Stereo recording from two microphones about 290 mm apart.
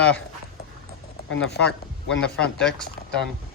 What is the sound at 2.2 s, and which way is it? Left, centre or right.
Speech, centre.